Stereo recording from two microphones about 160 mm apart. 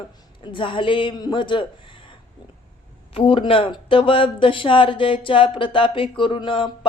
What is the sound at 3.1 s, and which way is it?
Speech, 35° left (ahead or behind).